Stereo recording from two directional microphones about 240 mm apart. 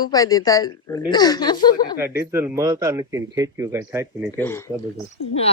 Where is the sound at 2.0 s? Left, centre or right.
Centre.